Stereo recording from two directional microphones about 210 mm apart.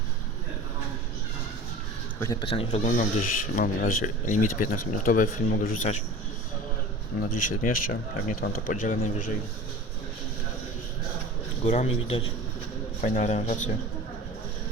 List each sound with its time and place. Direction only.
2.2 s speech: 20° left (ahead or behind)
3.0 s speech: 40° left (ahead or behind)
7.2 s speech: 35° left (ahead or behind)
11.6 s speech: 30° left (ahead or behind)